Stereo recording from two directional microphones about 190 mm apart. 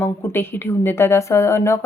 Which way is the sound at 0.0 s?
10° left (ahead or behind).